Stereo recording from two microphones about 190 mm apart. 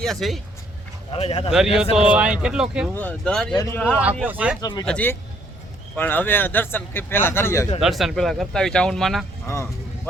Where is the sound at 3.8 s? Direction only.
5° right (ahead or behind).